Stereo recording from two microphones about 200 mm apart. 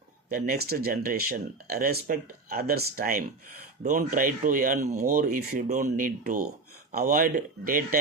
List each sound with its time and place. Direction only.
0.3 s speech: 45° right (ahead or behind)